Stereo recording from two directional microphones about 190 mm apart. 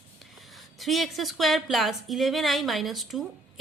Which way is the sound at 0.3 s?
Centre (ahead or behind).